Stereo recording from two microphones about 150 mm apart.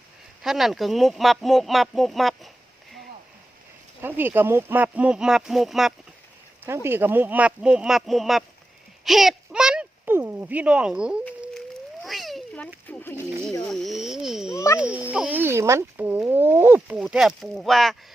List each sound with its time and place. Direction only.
0.4 s speech: centre (ahead or behind)
4.0 s speech: 15° right (ahead or behind)
6.7 s speech: 15° right (ahead or behind)
9.0 s a sound: centre (ahead or behind)
12.9 s speech: 15° left (ahead or behind)
13.7 s speech: centre (ahead or behind)
14.5 s speech: 20° left (ahead or behind)
14.8 s speech: 10° right (ahead or behind)